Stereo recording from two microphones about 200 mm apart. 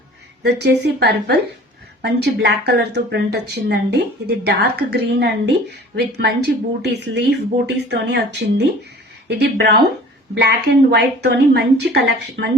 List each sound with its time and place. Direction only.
0.4 s a woman's voice: 55° right (ahead or behind)
10.9 s a woman's voice: 55° right (ahead or behind)